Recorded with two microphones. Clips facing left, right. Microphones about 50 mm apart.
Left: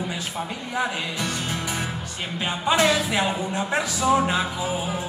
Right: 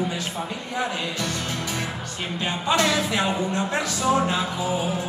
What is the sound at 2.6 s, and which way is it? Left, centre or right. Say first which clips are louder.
Speech: left 2 dB; centre.